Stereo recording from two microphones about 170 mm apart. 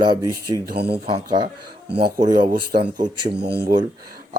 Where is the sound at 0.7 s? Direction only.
75° right (ahead or behind).